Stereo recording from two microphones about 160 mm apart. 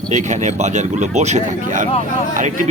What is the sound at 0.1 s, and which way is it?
Speech, 50° right (ahead or behind).